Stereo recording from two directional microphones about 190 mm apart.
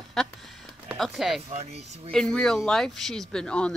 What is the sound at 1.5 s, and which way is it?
Speech, 35° right (ahead or behind).